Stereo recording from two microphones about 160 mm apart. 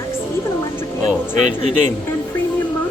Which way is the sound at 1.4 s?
45° right (ahead or behind).